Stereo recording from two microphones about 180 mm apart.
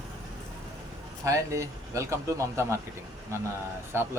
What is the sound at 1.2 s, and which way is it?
A man's voice, 15° right (ahead or behind).